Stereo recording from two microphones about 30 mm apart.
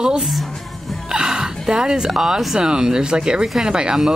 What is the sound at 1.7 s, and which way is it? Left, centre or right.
Speech, right.